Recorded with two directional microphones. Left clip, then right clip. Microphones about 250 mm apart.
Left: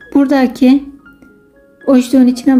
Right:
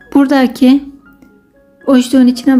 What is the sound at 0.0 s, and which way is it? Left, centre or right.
Speech, centre.